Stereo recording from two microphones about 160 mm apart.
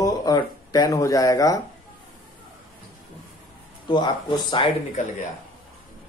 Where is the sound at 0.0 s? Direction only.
25° left (ahead or behind).